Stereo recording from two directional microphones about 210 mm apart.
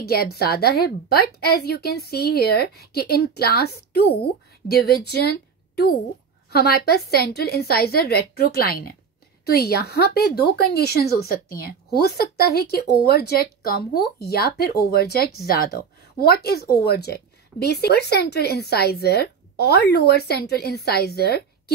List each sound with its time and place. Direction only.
0.0 s a woman's voice: 50° left (ahead or behind)
6.5 s a woman's voice: 50° left (ahead or behind)